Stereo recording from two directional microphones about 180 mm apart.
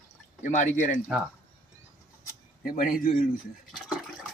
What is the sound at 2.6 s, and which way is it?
Speech, 50° left (ahead or behind).